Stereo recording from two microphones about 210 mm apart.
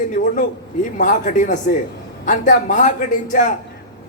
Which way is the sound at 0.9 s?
40° left (ahead or behind).